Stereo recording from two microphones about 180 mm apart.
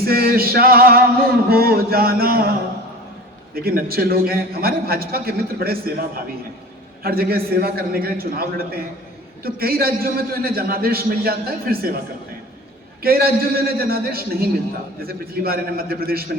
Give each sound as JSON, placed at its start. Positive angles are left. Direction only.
{"t": 0.0, "sound": "male singing", "side_deg": -55}
{"t": 7.0, "sound": "male singing", "side_deg": -55}
{"t": 13.0, "sound": "male singing", "side_deg": -55}